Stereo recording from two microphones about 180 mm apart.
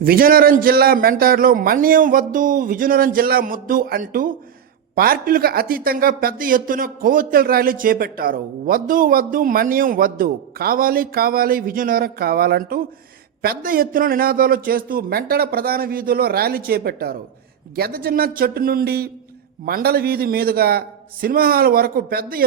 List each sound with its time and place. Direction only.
0.0 s a man's voice: 55° right (ahead or behind)